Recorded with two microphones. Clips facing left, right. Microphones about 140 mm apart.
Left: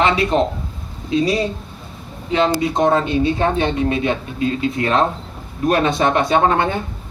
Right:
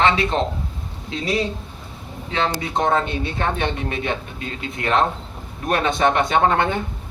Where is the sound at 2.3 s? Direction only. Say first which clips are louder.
Left 6 dB; 20° left (ahead or behind).